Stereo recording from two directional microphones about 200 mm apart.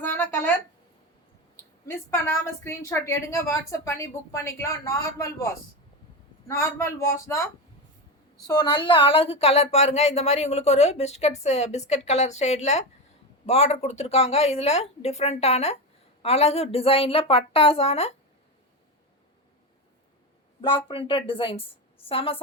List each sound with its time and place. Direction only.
0.0 s a sound: 10° left (ahead or behind)
1.9 s a woman's voice: 10° left (ahead or behind)
6.5 s a woman's voice: 15° left (ahead or behind)
8.4 s a woman's voice: 20° left (ahead or behind)
20.6 s a woman's voice: 25° left (ahead or behind)